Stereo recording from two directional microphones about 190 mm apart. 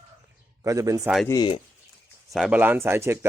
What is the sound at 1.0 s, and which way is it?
Speech, centre (ahead or behind).